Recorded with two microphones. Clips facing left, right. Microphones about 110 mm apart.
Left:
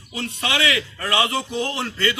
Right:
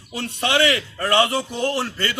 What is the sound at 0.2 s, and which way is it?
Speech, 50° right (ahead or behind).